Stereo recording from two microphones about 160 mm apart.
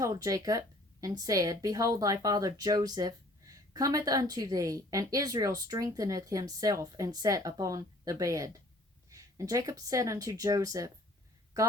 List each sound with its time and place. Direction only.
0.0 s speech: 20° right (ahead or behind)